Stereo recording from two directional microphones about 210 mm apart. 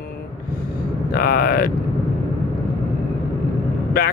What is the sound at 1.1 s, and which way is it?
Speech, 45° left (ahead or behind).